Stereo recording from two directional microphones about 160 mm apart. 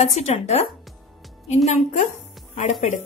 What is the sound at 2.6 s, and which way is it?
Speech, 50° left (ahead or behind).